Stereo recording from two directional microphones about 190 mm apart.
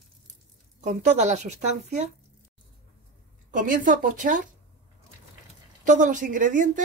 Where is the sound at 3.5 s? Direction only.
45° right (ahead or behind).